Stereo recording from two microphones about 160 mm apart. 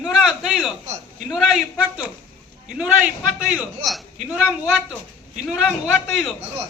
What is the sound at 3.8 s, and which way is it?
Speech, centre (ahead or behind).